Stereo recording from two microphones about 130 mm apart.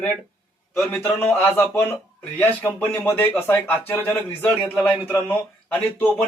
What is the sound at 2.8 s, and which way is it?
A man's voice, 15° left (ahead or behind).